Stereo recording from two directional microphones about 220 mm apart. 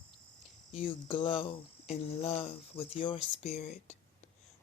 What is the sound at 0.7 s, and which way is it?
Speech, 25° left (ahead or behind).